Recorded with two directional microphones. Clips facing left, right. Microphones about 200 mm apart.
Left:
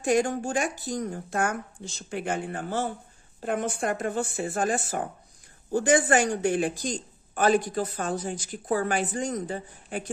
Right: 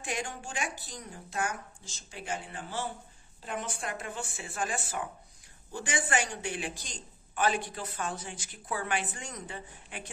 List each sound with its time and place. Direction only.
0.0 s speech: 45° left (ahead or behind)